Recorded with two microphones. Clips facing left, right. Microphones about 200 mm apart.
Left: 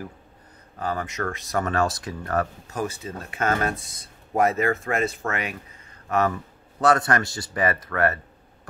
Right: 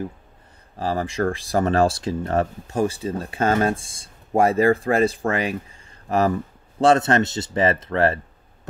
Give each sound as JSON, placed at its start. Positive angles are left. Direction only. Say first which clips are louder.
{"t": 0.7, "sound": "speech", "louder": "right 5 dB", "side_deg": -30}